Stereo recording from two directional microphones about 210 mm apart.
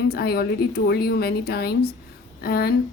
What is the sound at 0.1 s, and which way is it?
A woman's voice, 50° left (ahead or behind).